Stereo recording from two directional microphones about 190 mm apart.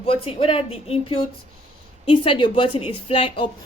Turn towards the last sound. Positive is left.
turn(degrees=30)  # may be behind; listen again after turning